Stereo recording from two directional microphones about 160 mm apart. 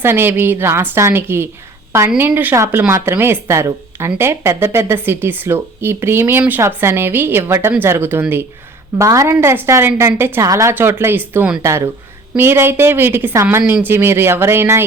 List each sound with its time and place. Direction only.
0.0 s speech: 15° right (ahead or behind)